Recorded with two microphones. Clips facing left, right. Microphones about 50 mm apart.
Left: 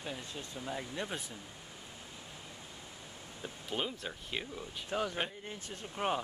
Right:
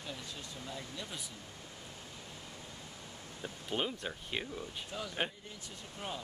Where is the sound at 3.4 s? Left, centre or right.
Centre.